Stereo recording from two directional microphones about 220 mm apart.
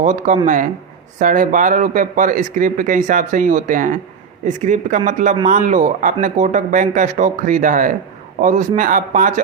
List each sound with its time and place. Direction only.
0.0 s speech: 35° right (ahead or behind)